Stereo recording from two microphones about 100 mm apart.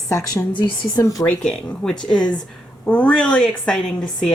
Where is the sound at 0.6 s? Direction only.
50° left (ahead or behind).